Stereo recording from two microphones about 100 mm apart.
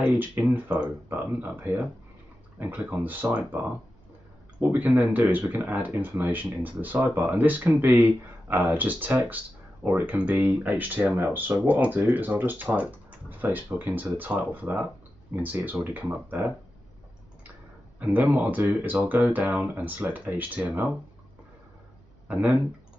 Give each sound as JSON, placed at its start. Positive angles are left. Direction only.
{"t": 0.0, "sound": "speech", "side_deg": -15}
{"t": 4.6, "sound": "speech", "side_deg": -20}
{"t": 17.9, "sound": "speech", "side_deg": -15}
{"t": 22.3, "sound": "speech", "side_deg": -15}